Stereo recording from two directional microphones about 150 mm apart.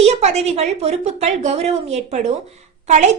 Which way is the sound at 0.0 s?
45° right (ahead or behind).